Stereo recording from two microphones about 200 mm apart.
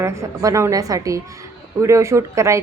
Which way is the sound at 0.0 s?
15° right (ahead or behind).